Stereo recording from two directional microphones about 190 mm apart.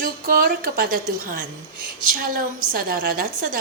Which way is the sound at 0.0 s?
50° right (ahead or behind).